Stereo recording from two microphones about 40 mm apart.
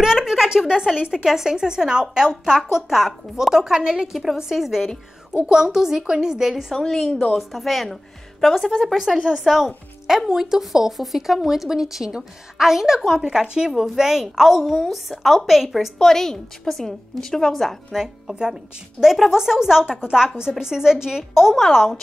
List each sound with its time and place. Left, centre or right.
0.0 s a sound: centre
1.0 s a woman's voice: centre
4.1 s a woman's voice: centre
6.7 s a woman's voice: centre
7.3 s a woman's voice: centre
9.3 s a woman's voice: centre
16.0 s a woman's voice: centre
17.9 s a woman's voice: centre
21.6 s a woman's voice: centre